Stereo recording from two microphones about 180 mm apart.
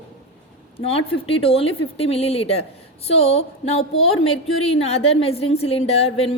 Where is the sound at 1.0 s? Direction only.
30° left (ahead or behind).